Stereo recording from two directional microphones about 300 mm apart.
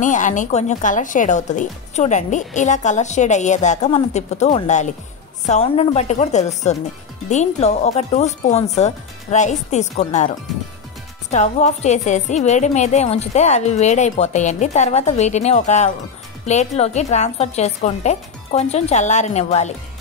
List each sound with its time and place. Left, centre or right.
0.0 s a woman's voice: left